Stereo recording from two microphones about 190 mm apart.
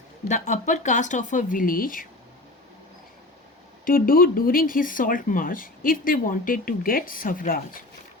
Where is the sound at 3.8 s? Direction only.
50° left (ahead or behind).